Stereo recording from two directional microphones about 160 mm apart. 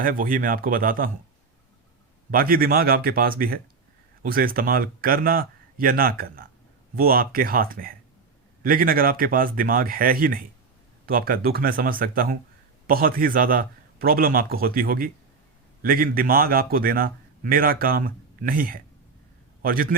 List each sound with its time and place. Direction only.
0.0 s a man's voice: 60° right (ahead or behind)
2.3 s a man's voice: 65° right (ahead or behind)